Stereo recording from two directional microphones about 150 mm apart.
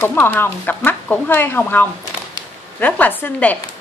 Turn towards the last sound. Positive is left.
turn(degrees=10)  # may be behind; listen again after turning